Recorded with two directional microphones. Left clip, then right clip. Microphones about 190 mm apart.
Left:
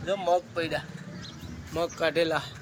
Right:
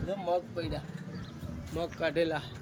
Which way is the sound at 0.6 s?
65° left (ahead or behind).